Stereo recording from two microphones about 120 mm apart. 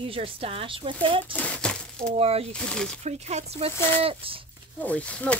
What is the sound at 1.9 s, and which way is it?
Speech, 55° right (ahead or behind).